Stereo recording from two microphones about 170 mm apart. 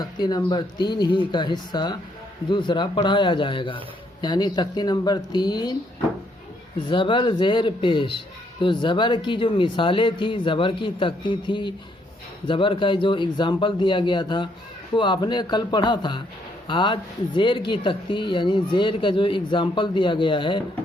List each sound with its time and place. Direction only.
0.0 s speech: 25° left (ahead or behind)
6.7 s speech: 30° left (ahead or behind)